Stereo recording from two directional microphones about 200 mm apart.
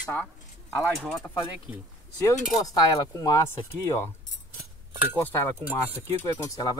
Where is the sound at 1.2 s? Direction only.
15° left (ahead or behind).